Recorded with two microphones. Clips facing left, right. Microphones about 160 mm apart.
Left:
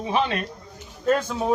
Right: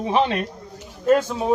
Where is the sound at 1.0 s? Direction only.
10° right (ahead or behind).